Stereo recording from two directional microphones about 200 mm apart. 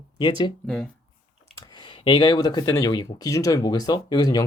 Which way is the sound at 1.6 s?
20° left (ahead or behind).